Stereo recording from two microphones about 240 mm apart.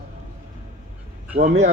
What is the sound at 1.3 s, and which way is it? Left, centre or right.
Speech, right.